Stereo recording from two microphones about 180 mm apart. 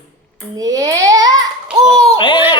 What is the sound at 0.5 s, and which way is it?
Speech, 20° right (ahead or behind).